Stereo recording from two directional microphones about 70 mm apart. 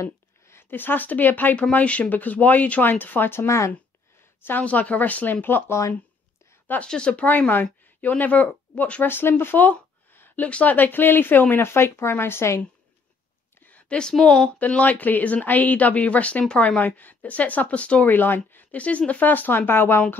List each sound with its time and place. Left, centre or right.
0.0 s a woman's voice: left
4.5 s a woman's voice: left
6.9 s a woman's voice: centre
9.0 s a woman's voice: left
13.6 s a woman's voice: left
14.6 s a woman's voice: left